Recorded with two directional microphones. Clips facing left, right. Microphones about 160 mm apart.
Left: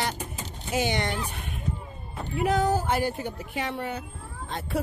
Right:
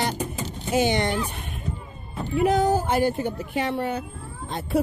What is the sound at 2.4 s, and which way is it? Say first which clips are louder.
Speech: right 4 dB; 15° right (ahead or behind).